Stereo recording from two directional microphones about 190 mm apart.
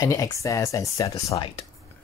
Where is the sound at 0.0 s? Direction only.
20° left (ahead or behind).